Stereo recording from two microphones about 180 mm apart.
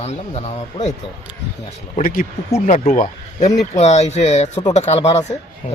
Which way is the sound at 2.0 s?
50° left (ahead or behind).